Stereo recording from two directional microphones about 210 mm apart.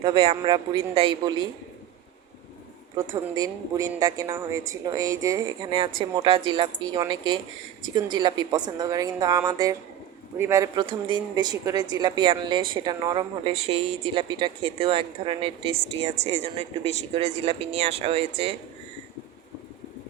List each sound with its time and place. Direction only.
0.0 s speech: 25° right (ahead or behind)
2.9 s a woman's voice: 15° right (ahead or behind)